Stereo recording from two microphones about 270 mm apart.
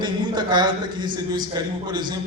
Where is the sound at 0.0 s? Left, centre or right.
Centre.